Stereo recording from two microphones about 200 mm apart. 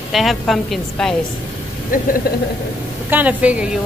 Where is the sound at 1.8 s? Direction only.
45° left (ahead or behind).